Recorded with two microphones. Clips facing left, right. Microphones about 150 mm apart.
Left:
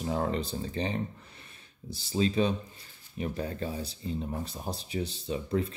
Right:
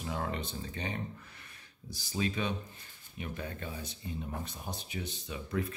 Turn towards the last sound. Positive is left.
turn(degrees=30)  # may be behind; listen again after turning